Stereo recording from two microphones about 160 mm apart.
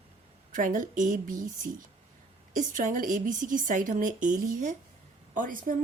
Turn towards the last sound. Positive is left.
turn(degrees=-55)  # may be behind; listen again after turning